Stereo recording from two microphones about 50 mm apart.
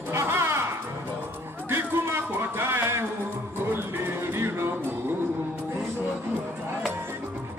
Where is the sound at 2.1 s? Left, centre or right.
Right.